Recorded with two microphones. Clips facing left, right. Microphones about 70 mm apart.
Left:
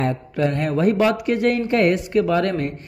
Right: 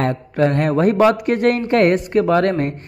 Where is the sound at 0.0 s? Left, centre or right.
Right.